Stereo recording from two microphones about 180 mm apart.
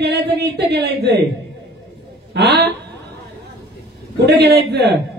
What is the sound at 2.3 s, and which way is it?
Speech, 65° right (ahead or behind).